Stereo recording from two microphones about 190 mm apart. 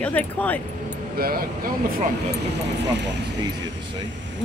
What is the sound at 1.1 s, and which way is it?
Speech, 50° right (ahead or behind).